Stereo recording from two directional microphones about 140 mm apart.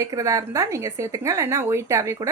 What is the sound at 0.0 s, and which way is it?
Speech, 25° right (ahead or behind).